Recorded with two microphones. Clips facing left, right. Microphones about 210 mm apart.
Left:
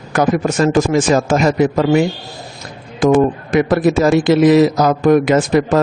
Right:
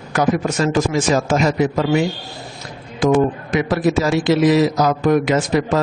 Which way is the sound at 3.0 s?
50° left (ahead or behind).